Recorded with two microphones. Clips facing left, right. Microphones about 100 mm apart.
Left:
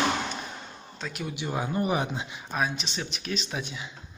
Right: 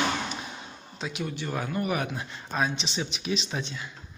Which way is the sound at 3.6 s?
15° left (ahead or behind).